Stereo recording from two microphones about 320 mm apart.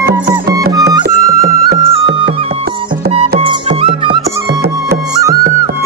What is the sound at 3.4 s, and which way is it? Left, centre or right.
Music, centre.